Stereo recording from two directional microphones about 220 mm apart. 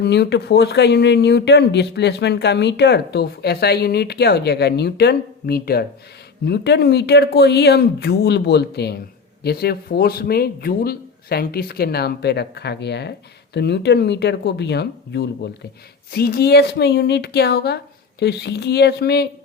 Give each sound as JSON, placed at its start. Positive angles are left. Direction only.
{"t": 0.0, "sound": "a man's voice", "side_deg": 50}